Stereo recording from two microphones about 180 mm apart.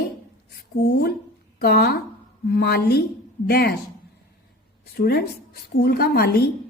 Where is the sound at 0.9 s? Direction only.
65° left (ahead or behind).